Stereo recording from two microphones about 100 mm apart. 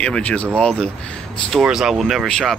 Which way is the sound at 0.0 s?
10° left (ahead or behind).